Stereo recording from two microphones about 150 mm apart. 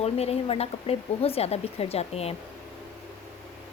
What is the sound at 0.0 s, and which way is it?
Speech, 45° left (ahead or behind).